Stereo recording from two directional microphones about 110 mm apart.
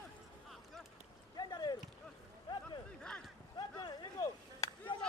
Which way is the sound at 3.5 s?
40° left (ahead or behind).